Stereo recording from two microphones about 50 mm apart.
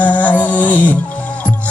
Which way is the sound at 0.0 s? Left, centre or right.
Left.